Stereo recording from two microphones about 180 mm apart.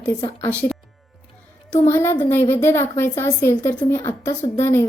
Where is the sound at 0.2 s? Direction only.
30° left (ahead or behind).